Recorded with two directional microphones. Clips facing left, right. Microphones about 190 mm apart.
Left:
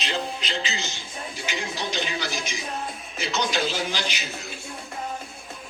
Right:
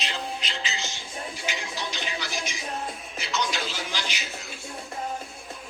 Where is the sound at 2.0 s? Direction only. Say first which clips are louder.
Left 4 dB; 25° left (ahead or behind).